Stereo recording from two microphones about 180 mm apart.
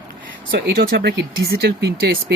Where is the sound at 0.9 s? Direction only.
60° right (ahead or behind).